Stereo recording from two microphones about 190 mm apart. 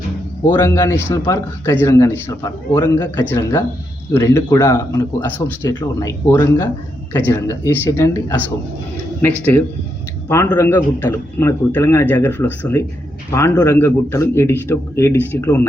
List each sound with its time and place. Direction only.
0.5 s a man's voice: 15° left (ahead or behind)